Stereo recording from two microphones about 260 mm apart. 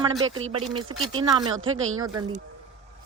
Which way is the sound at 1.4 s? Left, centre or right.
Right.